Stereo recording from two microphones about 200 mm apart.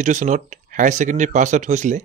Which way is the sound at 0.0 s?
40° right (ahead or behind).